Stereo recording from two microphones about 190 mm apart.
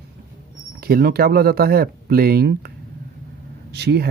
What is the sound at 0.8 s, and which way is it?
Speech, 55° right (ahead or behind).